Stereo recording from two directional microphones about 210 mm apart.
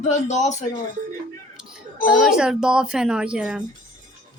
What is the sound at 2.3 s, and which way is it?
Speech, 5° right (ahead or behind).